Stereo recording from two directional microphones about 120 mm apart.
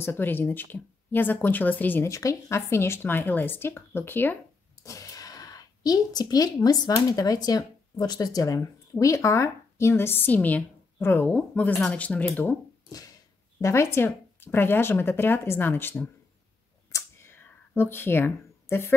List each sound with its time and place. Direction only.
0.0 s speech: 15° left (ahead or behind)
2.0 s speech: 25° left (ahead or behind)
4.8 s speech: 30° left (ahead or behind)
13.6 s speech: 25° left (ahead or behind)
16.9 s a sound: 20° left (ahead or behind)